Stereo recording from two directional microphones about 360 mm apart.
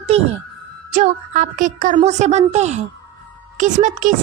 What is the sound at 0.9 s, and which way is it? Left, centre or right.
A woman's voice, right.